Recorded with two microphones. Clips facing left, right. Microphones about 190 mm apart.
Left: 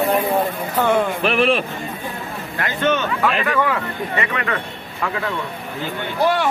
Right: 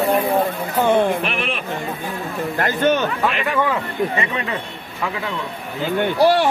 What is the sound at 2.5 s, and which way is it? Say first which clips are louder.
Speech: right 2 dB; 40° right (ahead or behind).